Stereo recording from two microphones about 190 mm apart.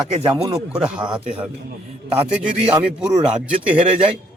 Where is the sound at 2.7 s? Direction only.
5° right (ahead or behind).